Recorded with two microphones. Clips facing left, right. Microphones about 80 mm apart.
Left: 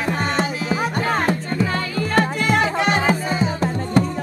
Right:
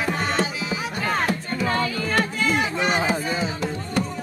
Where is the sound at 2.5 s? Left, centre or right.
Left.